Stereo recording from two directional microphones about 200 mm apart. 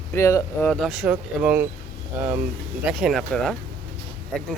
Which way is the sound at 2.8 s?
Centre (ahead or behind).